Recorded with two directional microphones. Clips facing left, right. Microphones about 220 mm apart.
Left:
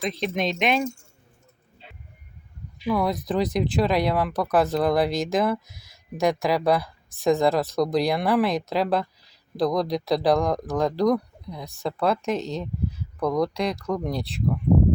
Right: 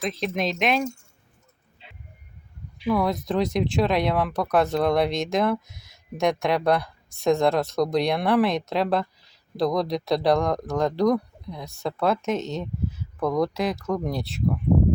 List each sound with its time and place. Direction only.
0.0 s speech: centre (ahead or behind)
1.8 s vehicle: 40° left (ahead or behind)
2.8 s speech: centre (ahead or behind)